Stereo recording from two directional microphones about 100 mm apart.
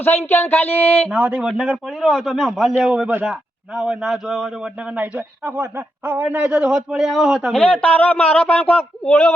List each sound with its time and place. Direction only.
0.3 s a sound: 20° left (ahead or behind)
1.1 s a man's voice: 10° right (ahead or behind)
4.9 s a man's voice: 15° right (ahead or behind)
7.5 s speech: 10° left (ahead or behind)